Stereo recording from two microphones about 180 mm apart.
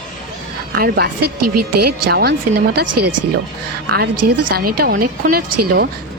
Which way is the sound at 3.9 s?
60° right (ahead or behind).